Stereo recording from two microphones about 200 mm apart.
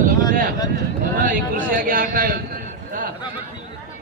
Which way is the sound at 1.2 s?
40° right (ahead or behind).